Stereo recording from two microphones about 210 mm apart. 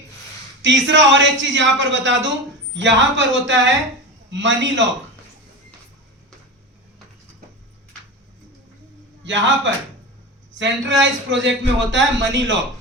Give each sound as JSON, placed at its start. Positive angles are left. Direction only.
{"t": 0.6, "sound": "a man's voice", "side_deg": -60}
{"t": 9.2, "sound": "a man's voice", "side_deg": -60}